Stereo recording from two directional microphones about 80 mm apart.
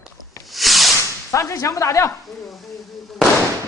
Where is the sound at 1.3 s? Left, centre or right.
Left.